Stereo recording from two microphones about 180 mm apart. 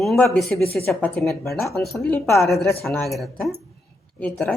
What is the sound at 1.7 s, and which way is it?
Speech, 15° left (ahead or behind).